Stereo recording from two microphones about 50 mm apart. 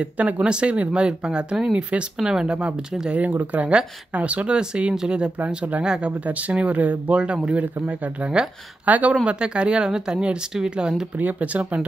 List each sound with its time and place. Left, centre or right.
0.0 s speech: right
3.1 s speech: right
9.1 s speech: right
11.1 s speech: right